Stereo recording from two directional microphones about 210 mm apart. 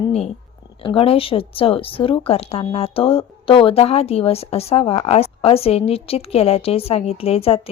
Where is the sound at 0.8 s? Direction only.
25° left (ahead or behind).